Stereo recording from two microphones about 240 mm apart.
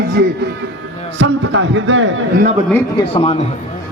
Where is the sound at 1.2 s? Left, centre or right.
Right.